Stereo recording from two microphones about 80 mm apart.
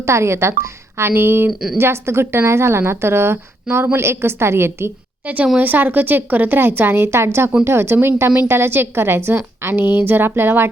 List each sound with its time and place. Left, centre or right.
0.0 s a woman's voice: right
5.2 s a woman's voice: centre